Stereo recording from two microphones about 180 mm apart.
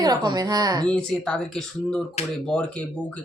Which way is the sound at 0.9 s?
5° left (ahead or behind).